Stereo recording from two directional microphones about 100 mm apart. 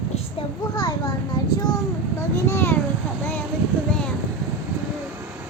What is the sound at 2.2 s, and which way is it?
Speech, 25° left (ahead or behind).